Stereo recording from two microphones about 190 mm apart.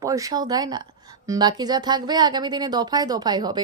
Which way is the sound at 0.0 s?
15° right (ahead or behind).